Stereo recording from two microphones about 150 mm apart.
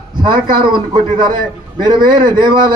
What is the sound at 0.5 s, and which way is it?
A man's voice, 30° right (ahead or behind).